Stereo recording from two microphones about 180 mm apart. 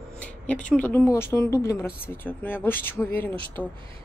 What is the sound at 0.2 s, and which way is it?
Speech, 5° left (ahead or behind).